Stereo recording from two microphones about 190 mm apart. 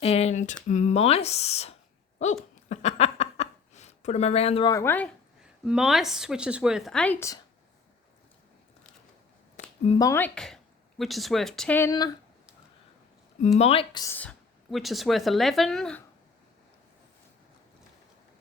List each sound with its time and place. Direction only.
0.0 s speech: 35° left (ahead or behind)
2.6 s a sound: 35° left (ahead or behind)
4.7 s speech: 15° left (ahead or behind)
5.6 s speech: 5° right (ahead or behind)
9.6 s a sound: 40° left (ahead or behind)
10.0 s speech: 10° left (ahead or behind)
13.4 s speech: 35° left (ahead or behind)
14.0 s speech: 10° left (ahead or behind)